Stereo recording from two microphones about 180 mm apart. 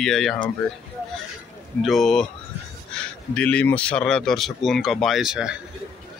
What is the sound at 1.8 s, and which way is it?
Speech, centre (ahead or behind).